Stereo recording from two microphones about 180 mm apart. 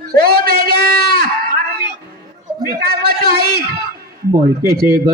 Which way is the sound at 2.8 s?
60° right (ahead or behind).